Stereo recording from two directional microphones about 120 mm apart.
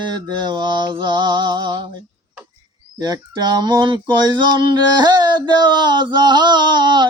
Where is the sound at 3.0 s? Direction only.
35° right (ahead or behind).